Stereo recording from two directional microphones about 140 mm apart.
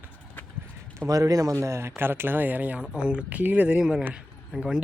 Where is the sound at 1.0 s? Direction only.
20° right (ahead or behind); by 4.8 s 5° right (ahead or behind).